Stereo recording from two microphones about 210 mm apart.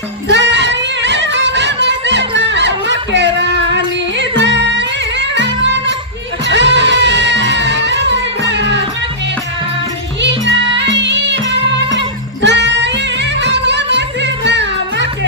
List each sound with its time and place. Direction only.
0.3 s music: 55° right (ahead or behind)
10.8 s music: 55° right (ahead or behind)
12.4 s music: 55° right (ahead or behind)